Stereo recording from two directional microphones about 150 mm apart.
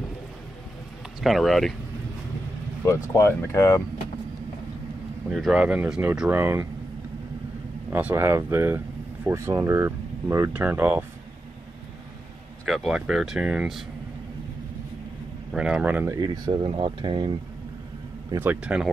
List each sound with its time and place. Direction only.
1.2 s speech: centre (ahead or behind)
2.9 s speech: 20° left (ahead or behind)
5.3 s speech: centre (ahead or behind)
7.9 s speech: 10° right (ahead or behind)
12.6 s speech: centre (ahead or behind)
15.5 s speech: 5° right (ahead or behind)
16.2 s speech: 30° right (ahead or behind)
18.3 s speech: 15° right (ahead or behind)